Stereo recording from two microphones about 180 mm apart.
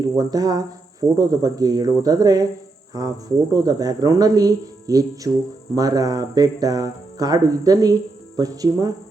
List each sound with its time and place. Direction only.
0.2 s speech: 20° right (ahead or behind)